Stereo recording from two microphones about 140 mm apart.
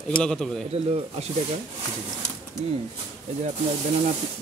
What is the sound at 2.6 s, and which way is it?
Speech, 50° right (ahead or behind).